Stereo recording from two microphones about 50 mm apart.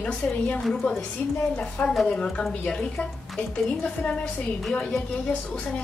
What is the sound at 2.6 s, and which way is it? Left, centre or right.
A woman's voice, centre.